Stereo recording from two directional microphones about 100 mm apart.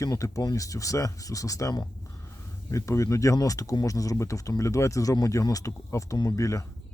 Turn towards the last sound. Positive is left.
turn(degrees=30)  # may be behind; listen again after turning